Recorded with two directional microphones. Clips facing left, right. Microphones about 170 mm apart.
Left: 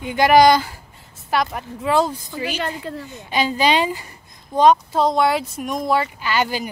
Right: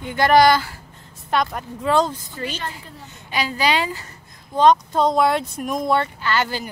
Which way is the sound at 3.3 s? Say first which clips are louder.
Left 3 dB; 20° left (ahead or behind).